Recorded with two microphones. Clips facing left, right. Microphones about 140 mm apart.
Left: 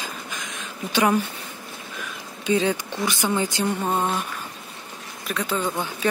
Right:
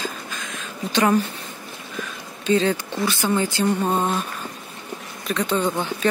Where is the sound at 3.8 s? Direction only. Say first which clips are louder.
Right 2 dB; 10° right (ahead or behind).